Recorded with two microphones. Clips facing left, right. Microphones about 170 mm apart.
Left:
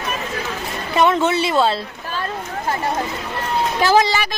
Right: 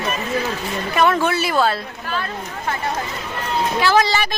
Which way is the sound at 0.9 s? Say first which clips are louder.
Left 2 dB; 20° left (ahead or behind).